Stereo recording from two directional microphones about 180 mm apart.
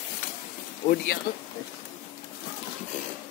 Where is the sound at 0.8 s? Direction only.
35° left (ahead or behind).